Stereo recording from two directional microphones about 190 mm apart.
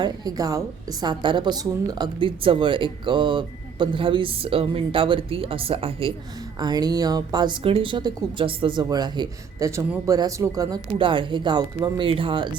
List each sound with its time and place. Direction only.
0.0 s speech: 20° right (ahead or behind)